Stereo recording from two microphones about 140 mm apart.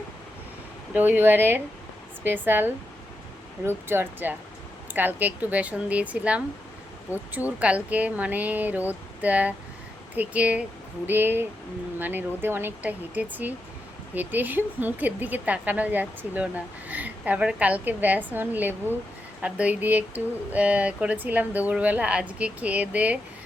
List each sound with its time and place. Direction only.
0.9 s speech: 15° right (ahead or behind)